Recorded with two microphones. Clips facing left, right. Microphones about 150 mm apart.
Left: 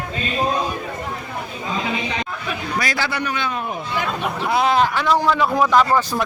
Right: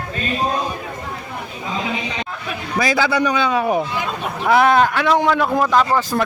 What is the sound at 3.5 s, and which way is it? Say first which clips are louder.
Speech: right 9 dB; 80° right.